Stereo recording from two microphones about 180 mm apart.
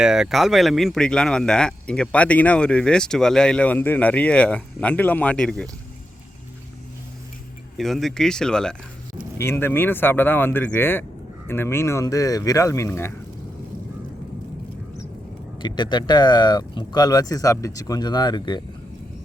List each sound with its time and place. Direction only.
0.0 s speech: 5° right (ahead or behind)
7.8 s speech: centre (ahead or behind)
15.6 s speech: 25° left (ahead or behind)